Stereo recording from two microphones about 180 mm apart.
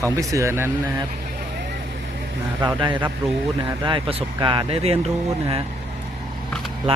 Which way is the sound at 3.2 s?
15° right (ahead or behind).